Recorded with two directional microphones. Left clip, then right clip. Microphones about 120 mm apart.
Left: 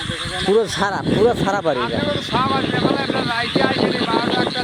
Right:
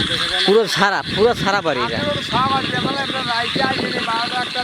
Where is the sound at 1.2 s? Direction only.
35° right (ahead or behind).